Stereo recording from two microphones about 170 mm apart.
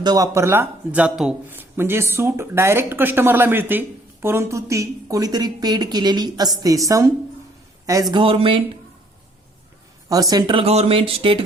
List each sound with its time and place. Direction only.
0.0 s speech: 20° right (ahead or behind)
8.1 s speech: 30° right (ahead or behind)
10.1 s speech: 20° right (ahead or behind)